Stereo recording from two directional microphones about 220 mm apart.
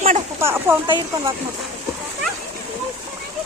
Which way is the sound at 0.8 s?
20° right (ahead or behind).